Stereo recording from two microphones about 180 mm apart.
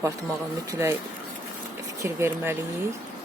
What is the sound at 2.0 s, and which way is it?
Speech, 15° right (ahead or behind).